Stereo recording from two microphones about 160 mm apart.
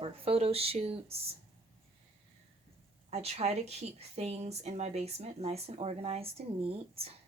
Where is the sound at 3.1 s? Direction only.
40° right (ahead or behind).